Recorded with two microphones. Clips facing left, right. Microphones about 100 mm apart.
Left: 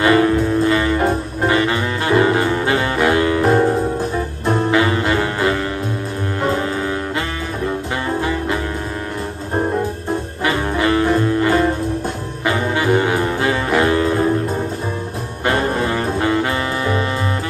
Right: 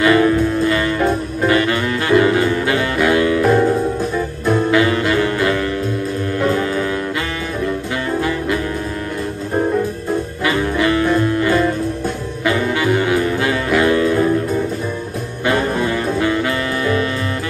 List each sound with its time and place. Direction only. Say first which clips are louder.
0.0 s music: right 1 dB; 30° left (ahead or behind)
1.0 s saxophone: right 1 dB; 30° left (ahead or behind)
4.5 s music: right 1 dB; 30° left (ahead or behind)
10.4 s music: even; 30° left (ahead or behind)